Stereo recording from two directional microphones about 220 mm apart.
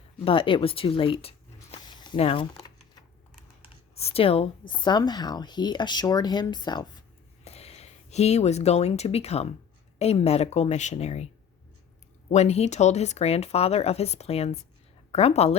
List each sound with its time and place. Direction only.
0.3 s speech: 25° left (ahead or behind)
1.7 s a sound: 20° left (ahead or behind)
3.9 s speech: 25° left (ahead or behind)
12.3 s speech: 30° left (ahead or behind)